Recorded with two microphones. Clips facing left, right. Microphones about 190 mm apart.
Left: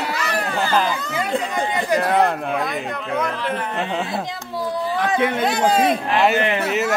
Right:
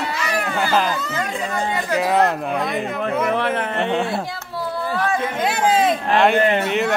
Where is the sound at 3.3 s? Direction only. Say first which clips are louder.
Right 4 dB; 65° right (ahead or behind).